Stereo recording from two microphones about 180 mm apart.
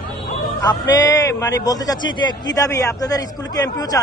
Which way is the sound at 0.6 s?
20° left (ahead or behind).